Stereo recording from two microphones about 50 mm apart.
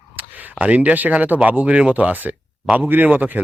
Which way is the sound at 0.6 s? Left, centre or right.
Right.